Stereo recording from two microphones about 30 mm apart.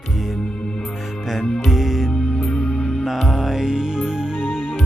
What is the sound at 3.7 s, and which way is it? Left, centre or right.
Music, right.